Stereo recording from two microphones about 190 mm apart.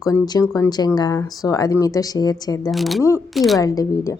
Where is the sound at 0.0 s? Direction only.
15° left (ahead or behind).